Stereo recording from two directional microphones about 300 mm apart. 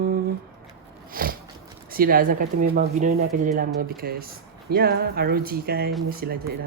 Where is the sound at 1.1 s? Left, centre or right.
Right.